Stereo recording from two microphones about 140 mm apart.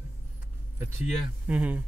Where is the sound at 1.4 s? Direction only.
10° right (ahead or behind).